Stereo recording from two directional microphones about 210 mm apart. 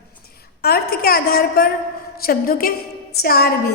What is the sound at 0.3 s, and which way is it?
A woman's voice, 45° left (ahead or behind).